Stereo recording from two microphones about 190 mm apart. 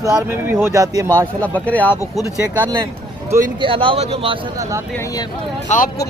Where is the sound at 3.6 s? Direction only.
25° right (ahead or behind).